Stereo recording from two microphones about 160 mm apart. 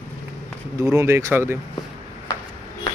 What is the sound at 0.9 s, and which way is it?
Speech, 20° right (ahead or behind).